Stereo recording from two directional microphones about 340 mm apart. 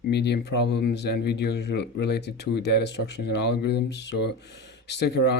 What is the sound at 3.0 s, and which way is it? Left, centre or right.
Speech, left.